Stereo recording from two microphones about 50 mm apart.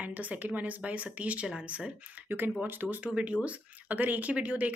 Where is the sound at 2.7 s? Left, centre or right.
Right.